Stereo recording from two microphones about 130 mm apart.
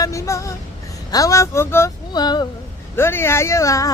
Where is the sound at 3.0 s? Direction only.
20° left (ahead or behind).